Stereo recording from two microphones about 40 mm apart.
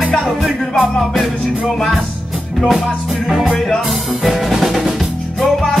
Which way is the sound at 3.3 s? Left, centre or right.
Centre.